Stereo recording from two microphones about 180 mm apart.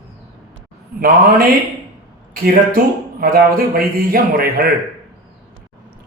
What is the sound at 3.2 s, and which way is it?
A man's voice, 55° right (ahead or behind).